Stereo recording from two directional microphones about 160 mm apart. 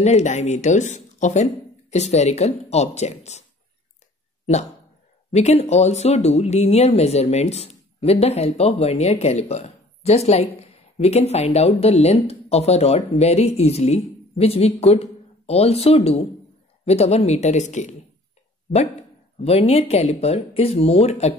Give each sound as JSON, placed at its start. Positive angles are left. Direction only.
{"t": 0.0, "sound": "speech", "side_deg": 45}
{"t": 5.3, "sound": "speech", "side_deg": 40}
{"t": 19.4, "sound": "speech", "side_deg": 40}